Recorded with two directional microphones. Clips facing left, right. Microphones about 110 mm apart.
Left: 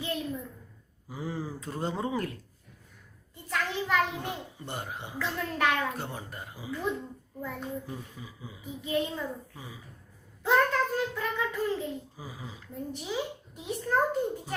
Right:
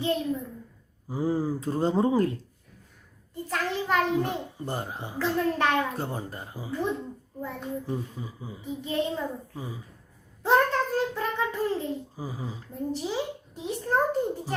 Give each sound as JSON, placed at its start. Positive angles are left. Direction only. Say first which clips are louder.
{"t": 0.0, "sound": "a child's voice", "louder": "right 6 dB", "side_deg": -30}
{"t": 10.4, "sound": "a child's voice", "louder": "right 2 dB", "side_deg": -35}